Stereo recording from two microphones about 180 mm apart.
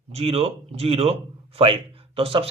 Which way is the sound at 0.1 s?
35° right (ahead or behind).